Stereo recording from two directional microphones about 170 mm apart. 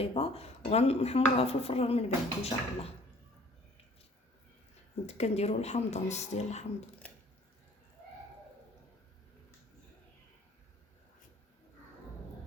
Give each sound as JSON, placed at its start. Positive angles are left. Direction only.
{"t": 0.0, "sound": "speech", "side_deg": 35}
{"t": 5.0, "sound": "speech", "side_deg": 40}
{"t": 7.0, "sound": "a sound", "side_deg": 10}